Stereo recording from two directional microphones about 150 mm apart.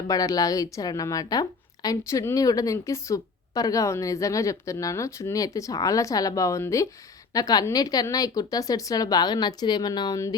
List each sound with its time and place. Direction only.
0.1 s a woman's voice: 25° left (ahead or behind)